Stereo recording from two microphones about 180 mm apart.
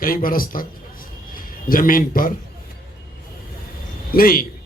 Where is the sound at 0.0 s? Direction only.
50° left (ahead or behind).